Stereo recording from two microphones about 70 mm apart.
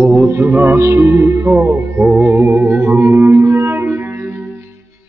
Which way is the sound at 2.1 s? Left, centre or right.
Right.